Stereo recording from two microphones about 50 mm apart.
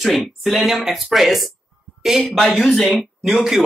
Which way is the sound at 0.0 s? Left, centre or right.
Centre.